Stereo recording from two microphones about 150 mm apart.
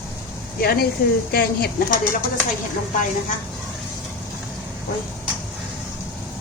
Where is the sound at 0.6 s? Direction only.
85° left.